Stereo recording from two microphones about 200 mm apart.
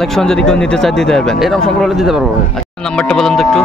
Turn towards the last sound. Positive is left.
turn(degrees=0)  # may be behind; listen again after turning